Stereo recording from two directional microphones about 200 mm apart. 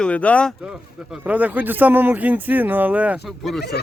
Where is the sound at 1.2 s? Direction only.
5° right (ahead or behind).